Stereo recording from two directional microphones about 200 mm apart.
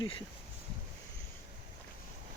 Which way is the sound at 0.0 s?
25° left (ahead or behind).